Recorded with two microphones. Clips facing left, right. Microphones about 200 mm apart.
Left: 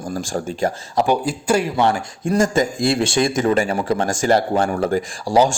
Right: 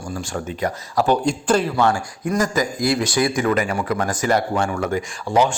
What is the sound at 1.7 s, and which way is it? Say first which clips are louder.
Speech: left 1 dB; 20° left (ahead or behind).